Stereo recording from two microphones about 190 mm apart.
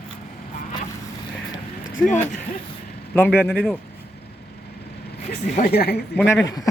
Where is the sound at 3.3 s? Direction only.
10° left (ahead or behind).